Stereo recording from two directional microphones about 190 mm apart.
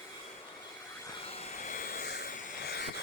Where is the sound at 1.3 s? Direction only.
35° left (ahead or behind); by 2.9 s 55° left (ahead or behind).